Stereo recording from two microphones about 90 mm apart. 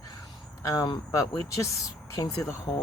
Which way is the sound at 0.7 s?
40° left (ahead or behind).